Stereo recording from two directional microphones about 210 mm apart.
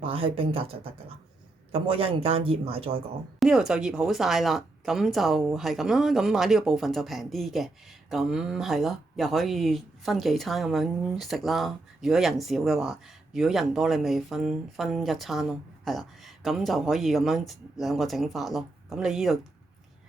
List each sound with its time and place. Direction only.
0.0 s a man's voice: 25° right (ahead or behind)
3.4 s speech: 5° right (ahead or behind)